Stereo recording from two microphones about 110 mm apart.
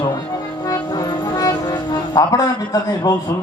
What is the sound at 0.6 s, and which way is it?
Music, 35° left (ahead or behind).